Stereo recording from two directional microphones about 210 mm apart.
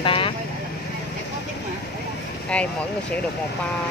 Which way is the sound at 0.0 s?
25° left (ahead or behind).